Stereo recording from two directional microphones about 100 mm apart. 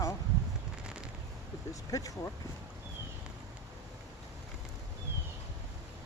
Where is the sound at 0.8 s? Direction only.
10° right (ahead or behind).